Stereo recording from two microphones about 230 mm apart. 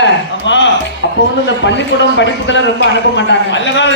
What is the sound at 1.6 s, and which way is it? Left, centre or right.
A man's voice, left.